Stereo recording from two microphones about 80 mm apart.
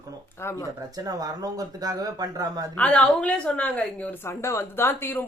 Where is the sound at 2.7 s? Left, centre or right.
Centre.